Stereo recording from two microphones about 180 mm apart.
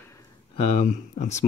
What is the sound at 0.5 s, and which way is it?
Speech, 40° left (ahead or behind).